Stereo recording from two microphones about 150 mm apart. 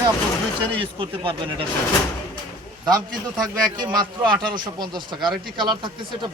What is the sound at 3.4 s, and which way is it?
A man's voice, 30° right (ahead or behind).